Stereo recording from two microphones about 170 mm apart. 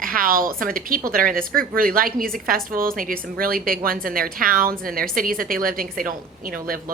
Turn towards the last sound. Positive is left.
turn(degrees=-55)  # may be behind; listen again after turning